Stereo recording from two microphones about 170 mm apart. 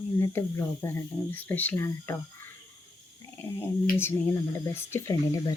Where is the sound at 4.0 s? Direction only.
15° left (ahead or behind).